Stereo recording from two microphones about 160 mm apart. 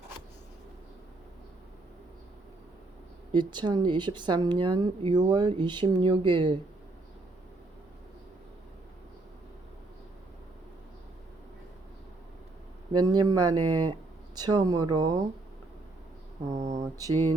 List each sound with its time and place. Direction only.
3.3 s a woman's voice: 30° right (ahead or behind)
12.9 s a woman's voice: 25° right (ahead or behind)
16.6 s speech: 45° right (ahead or behind)
16.8 s a woman's voice: 25° right (ahead or behind)